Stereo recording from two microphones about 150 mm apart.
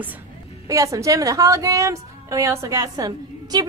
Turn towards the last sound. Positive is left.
turn(degrees=-25)  # may be behind; listen again after turning